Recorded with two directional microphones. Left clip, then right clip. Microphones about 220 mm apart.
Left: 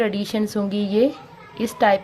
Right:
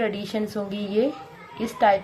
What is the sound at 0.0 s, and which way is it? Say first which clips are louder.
A woman's voice: left 4 dB; 50° left (ahead or behind).